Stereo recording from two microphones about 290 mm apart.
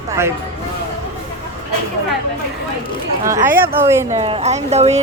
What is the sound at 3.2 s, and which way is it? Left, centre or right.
Speech, centre.